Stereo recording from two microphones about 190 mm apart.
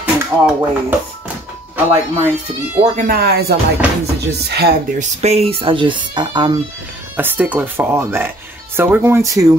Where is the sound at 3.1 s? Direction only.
55° right (ahead or behind).